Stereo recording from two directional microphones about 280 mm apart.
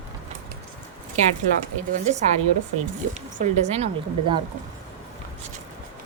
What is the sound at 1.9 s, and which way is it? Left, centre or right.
A woman's voice, right.